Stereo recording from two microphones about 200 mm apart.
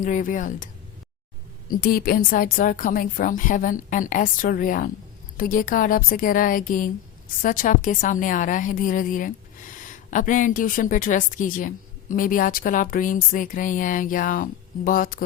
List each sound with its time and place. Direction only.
0.0 s a woman's voice: 40° left (ahead or behind)
1.7 s a woman's voice: 45° left (ahead or behind)